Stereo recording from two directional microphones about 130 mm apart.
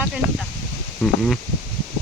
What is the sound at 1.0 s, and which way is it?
Speech, 5° left (ahead or behind).